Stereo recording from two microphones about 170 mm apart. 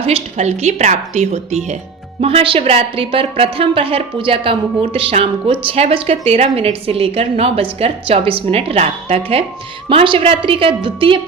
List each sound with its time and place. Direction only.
0.0 s a woman's voice: 35° right (ahead or behind)